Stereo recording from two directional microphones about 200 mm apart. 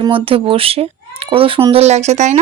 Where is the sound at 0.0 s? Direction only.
25° right (ahead or behind).